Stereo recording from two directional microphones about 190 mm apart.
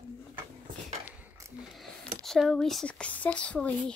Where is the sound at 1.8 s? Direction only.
Centre (ahead or behind).